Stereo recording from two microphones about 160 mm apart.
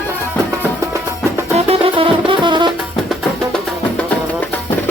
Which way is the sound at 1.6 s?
35° right (ahead or behind).